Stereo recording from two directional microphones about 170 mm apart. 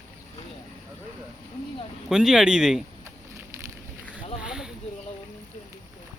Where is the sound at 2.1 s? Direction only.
5° right (ahead or behind).